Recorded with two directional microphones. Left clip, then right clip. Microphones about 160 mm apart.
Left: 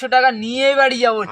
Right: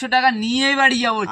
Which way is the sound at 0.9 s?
20° left (ahead or behind).